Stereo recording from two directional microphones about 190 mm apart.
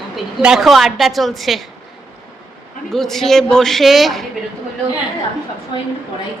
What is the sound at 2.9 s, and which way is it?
A woman's voice, centre (ahead or behind).